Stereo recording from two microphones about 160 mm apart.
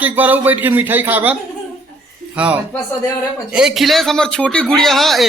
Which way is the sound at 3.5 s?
Centre (ahead or behind).